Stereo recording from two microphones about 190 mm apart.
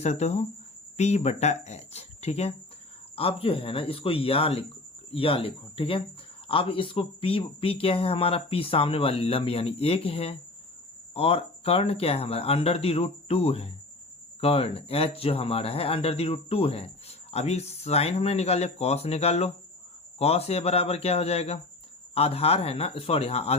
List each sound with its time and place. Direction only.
0.0 s speech: 35° left (ahead or behind)